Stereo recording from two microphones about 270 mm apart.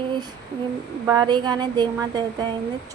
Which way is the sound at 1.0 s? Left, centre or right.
Centre.